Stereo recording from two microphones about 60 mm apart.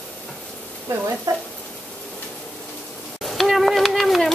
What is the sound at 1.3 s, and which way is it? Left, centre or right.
Speech, right.